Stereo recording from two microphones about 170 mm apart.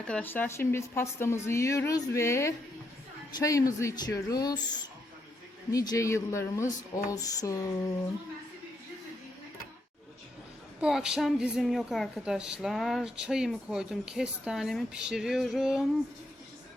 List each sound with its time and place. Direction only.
0.0 s speech: 10° left (ahead or behind)
5.7 s speech: 20° left (ahead or behind)
10.8 s a woman's voice: 5° right (ahead or behind)